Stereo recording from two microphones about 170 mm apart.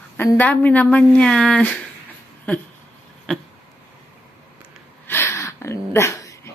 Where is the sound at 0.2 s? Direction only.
10° left (ahead or behind).